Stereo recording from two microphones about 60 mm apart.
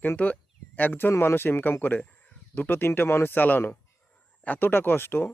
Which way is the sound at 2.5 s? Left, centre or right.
Left.